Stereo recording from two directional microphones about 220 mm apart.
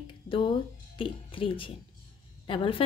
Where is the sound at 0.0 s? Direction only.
25° left (ahead or behind).